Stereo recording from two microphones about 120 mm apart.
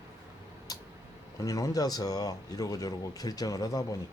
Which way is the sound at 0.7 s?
30° left (ahead or behind).